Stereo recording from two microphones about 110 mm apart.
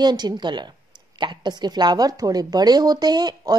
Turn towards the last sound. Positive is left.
turn(degrees=-40)  # may be behind; listen again after turning